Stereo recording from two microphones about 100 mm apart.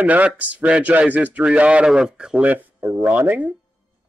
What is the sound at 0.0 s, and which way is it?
A man's voice, 15° right (ahead or behind).